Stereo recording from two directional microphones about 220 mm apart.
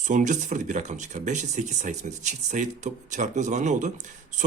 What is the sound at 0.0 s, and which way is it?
Speech, 35° right (ahead or behind).